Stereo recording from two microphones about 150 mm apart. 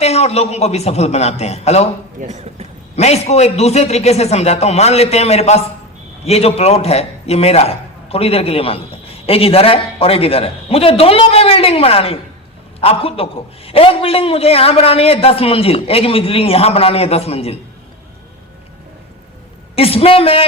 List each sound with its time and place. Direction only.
0.0 s a man's voice: 45° left (ahead or behind)
2.2 s a man's voice: 45° right (ahead or behind)
2.9 s a man's voice: 45° left (ahead or behind)
19.7 s a man's voice: 40° left (ahead or behind)